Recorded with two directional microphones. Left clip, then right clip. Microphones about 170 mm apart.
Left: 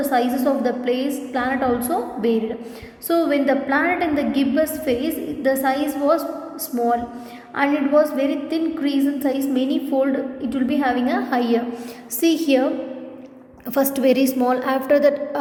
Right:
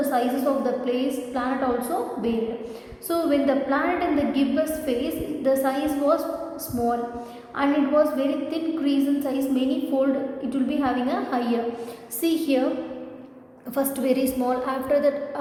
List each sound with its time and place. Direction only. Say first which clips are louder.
0.1 s a woman's voice: left 3 dB; 35° left (ahead or behind)
7.5 s a woman's voice: left 4 dB; 35° left (ahead or behind)
13.7 s a woman's voice: left 6 dB; 40° left (ahead or behind)